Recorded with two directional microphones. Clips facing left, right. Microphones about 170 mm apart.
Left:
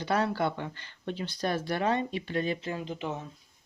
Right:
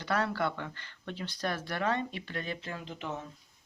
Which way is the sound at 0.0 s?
20° left (ahead or behind).